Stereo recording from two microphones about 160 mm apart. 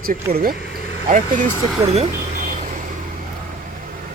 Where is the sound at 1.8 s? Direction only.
40° right (ahead or behind).